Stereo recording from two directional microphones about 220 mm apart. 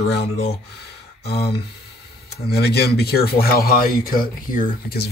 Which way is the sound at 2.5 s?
45° left (ahead or behind).